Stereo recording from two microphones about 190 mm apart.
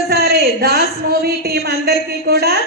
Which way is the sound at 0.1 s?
55° right (ahead or behind).